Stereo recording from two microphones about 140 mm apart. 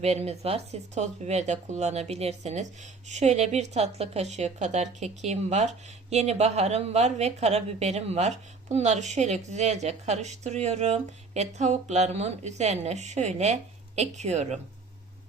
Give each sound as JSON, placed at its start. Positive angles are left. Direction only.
{"t": 0.0, "sound": "a woman's voice", "side_deg": -50}